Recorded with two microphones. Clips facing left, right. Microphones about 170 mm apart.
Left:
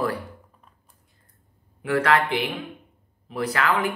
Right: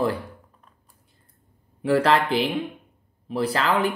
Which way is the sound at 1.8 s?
35° right (ahead or behind).